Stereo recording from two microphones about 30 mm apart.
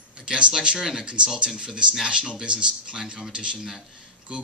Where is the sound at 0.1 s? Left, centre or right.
Right.